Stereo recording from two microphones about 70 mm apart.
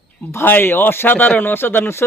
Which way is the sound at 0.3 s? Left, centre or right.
Left.